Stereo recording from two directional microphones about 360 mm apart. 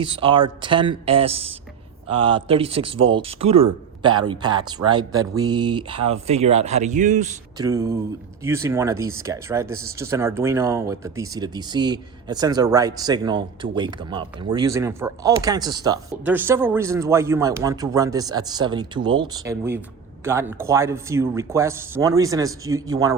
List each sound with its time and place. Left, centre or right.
0.0 s speech: centre